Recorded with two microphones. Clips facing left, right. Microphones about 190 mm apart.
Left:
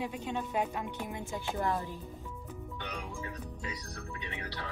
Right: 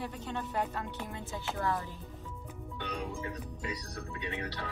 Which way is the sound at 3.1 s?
20° right (ahead or behind).